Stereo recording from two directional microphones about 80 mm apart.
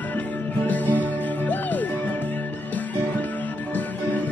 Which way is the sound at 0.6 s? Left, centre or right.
Left.